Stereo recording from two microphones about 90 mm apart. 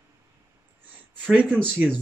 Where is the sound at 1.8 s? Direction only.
15° right (ahead or behind).